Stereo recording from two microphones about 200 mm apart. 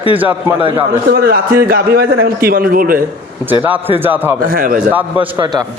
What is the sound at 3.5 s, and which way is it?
Speech, 10° right (ahead or behind).